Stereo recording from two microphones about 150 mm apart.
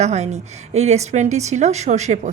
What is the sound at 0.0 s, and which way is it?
A woman's voice, 50° right (ahead or behind).